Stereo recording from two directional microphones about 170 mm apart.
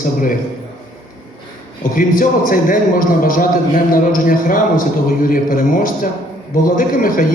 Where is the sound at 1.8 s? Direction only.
55° left (ahead or behind).